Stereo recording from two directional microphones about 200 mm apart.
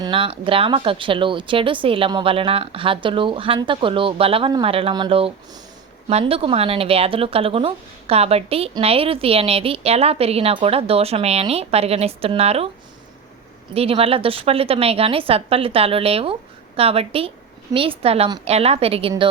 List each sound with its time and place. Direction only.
0.0 s speech: 25° right (ahead or behind)
13.7 s speech: 30° right (ahead or behind)